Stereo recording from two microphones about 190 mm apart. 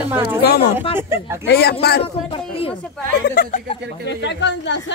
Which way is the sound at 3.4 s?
50° left (ahead or behind).